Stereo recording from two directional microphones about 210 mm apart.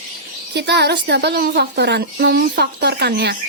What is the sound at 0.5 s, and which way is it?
Speech, 55° right (ahead or behind).